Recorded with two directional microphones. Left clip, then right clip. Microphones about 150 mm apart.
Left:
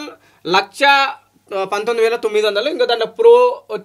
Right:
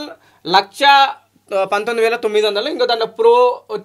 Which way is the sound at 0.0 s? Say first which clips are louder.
Even; 45° right (ahead or behind).